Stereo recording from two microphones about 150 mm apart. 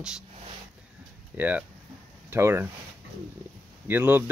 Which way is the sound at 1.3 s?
10° right (ahead or behind).